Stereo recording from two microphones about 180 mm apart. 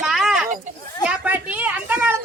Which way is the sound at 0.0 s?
Centre (ahead or behind).